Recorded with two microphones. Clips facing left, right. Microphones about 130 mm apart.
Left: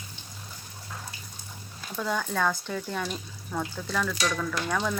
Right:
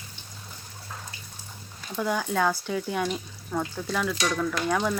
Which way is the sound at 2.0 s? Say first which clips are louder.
Right 3 dB; 10° right (ahead or behind).